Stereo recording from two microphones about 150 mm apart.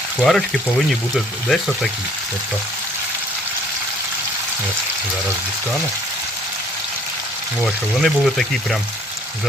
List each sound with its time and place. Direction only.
0.2 s speech: 5° left (ahead or behind)
7.6 s speech: centre (ahead or behind)